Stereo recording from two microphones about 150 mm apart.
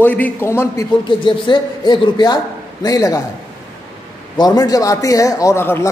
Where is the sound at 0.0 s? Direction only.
10° left (ahead or behind).